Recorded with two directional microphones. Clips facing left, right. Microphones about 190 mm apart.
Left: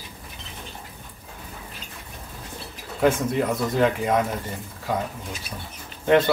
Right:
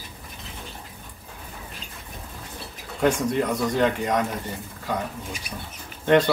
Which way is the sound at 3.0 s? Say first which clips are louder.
Left 1 dB; centre (ahead or behind).